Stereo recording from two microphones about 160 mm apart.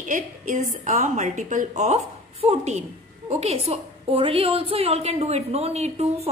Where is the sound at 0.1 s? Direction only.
50° right (ahead or behind).